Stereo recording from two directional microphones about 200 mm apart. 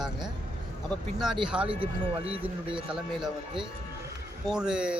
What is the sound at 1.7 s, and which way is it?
Speech, 30° right (ahead or behind).